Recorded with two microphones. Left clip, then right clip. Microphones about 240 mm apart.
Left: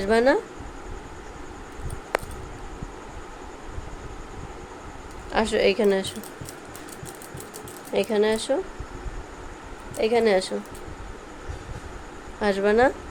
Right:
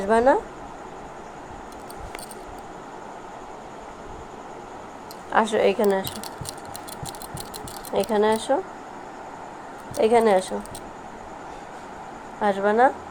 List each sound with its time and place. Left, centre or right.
0.0 s a woman's voice: centre
5.3 s a woman's voice: centre
7.9 s a woman's voice: centre
10.0 s a woman's voice: centre
12.4 s speech: left